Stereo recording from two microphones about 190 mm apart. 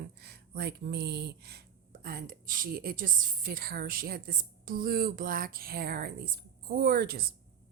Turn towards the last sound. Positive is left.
turn(degrees=-55)  # may be behind; listen again after turning